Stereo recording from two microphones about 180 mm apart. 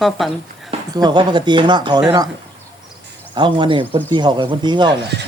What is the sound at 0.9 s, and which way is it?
Speech, 25° right (ahead or behind).